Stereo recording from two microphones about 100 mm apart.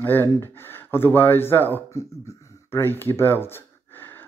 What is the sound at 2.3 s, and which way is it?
Gasp, 25° left (ahead or behind).